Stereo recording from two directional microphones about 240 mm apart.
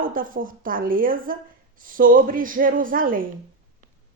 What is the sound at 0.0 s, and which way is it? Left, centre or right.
A woman's voice, right.